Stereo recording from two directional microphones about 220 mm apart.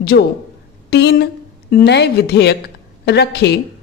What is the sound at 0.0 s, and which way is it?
A woman's voice, 45° left (ahead or behind).